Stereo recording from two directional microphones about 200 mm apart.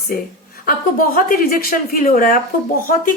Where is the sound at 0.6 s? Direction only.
45° left (ahead or behind).